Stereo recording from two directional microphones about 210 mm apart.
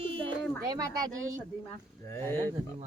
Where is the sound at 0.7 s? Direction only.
15° right (ahead or behind).